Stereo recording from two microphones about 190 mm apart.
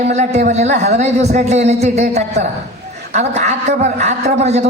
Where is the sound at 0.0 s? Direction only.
35° right (ahead or behind).